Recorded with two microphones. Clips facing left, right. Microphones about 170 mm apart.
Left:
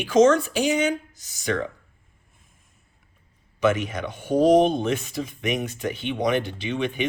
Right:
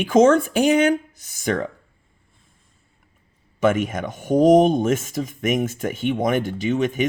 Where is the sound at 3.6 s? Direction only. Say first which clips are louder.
Right 3 dB; 50° right (ahead or behind).